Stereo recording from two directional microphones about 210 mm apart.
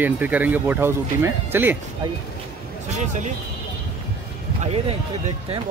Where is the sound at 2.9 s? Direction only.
35° right (ahead or behind).